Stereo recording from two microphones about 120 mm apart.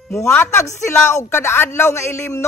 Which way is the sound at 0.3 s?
20° left (ahead or behind).